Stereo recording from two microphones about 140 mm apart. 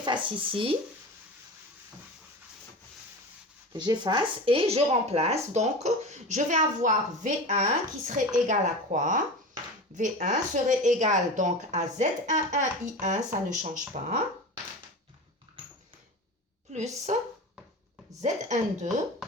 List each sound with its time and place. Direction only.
0.0 s speech: 35° right (ahead or behind)
3.7 s speech: 30° right (ahead or behind); by 13.8 s 60° right (ahead or behind)
16.7 s speech: 55° right (ahead or behind)
18.2 s speech: 55° right (ahead or behind)